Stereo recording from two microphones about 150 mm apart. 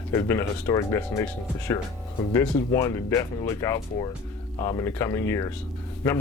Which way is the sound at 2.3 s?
20° left (ahead or behind).